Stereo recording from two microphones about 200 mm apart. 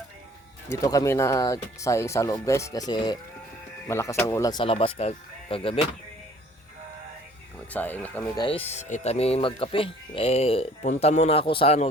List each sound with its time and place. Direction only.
0.7 s speech: 15° left (ahead or behind)
7.7 s speech: 10° left (ahead or behind)
8.4 s speech: 25° left (ahead or behind)